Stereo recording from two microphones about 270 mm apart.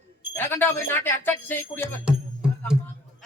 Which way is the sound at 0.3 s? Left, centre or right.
Centre.